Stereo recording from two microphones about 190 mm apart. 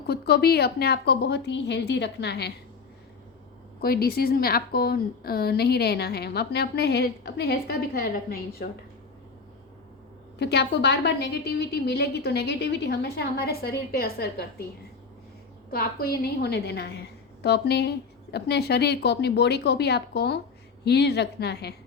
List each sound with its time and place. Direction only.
0.1 s a woman's voice: 55° left (ahead or behind)
3.8 s a woman's voice: 55° left (ahead or behind)
10.3 s a woman's voice: 60° left (ahead or behind)
15.7 s a woman's voice: 50° left (ahead or behind)